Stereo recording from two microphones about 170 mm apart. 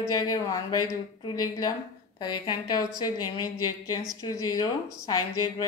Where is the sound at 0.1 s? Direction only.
20° left (ahead or behind).